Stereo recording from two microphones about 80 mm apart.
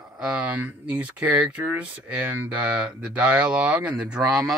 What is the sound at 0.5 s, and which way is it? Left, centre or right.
Speech, centre.